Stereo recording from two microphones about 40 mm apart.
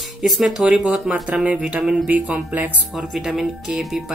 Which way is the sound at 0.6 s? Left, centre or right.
Right.